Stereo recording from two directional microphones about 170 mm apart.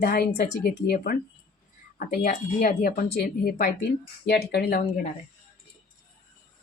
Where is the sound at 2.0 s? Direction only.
55° left (ahead or behind).